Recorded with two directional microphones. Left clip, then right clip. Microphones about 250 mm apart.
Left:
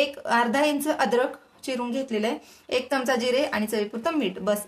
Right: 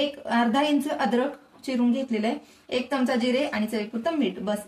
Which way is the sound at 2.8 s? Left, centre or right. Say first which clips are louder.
Even; left.